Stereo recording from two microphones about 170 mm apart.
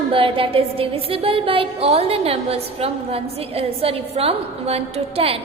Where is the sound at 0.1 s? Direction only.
30° right (ahead or behind).